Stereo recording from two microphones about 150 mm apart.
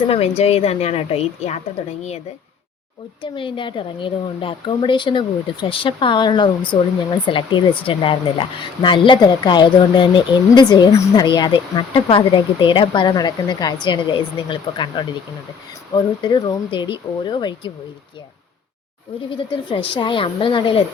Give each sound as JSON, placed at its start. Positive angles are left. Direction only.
{"t": 0.1, "sound": "a woman's voice", "side_deg": 40}
{"t": 3.3, "sound": "speech", "side_deg": 35}
{"t": 19.5, "sound": "speech", "side_deg": 35}